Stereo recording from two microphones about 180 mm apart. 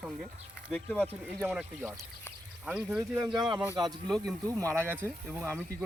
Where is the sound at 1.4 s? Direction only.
10° right (ahead or behind).